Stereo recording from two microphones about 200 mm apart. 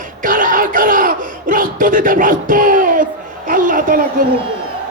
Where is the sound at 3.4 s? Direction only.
45° right (ahead or behind).